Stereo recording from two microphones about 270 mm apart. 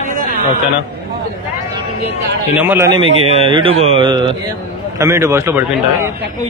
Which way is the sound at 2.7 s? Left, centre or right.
Centre.